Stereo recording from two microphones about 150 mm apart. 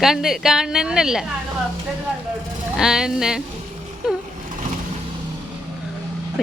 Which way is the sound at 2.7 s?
5° right (ahead or behind).